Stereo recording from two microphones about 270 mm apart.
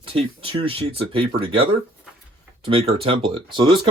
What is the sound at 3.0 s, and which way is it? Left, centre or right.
Speech, centre.